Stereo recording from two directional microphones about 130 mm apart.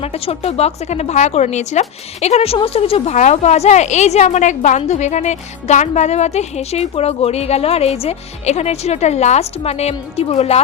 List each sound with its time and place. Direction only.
0.0 s speech: 50° left (ahead or behind)
3.2 s speech: 60° left (ahead or behind)